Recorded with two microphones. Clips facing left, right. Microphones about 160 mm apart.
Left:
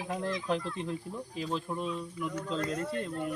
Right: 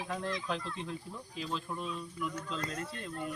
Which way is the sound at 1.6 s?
25° left (ahead or behind).